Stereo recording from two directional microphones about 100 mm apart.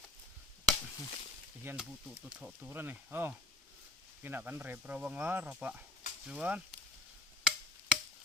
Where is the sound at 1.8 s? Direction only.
10° right (ahead or behind).